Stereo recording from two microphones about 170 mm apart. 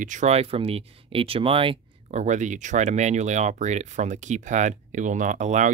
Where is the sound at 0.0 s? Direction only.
45° right (ahead or behind).